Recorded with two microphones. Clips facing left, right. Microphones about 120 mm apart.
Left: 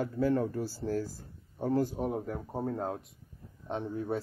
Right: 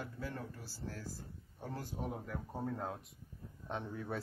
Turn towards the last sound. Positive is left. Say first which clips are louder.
# left 8 dB
turn(degrees=30)  # may be behind; listen again after turning